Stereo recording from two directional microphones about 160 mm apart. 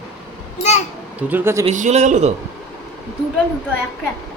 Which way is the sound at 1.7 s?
45° right (ahead or behind).